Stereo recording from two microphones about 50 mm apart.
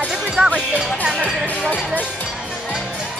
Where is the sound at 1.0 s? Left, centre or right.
Centre.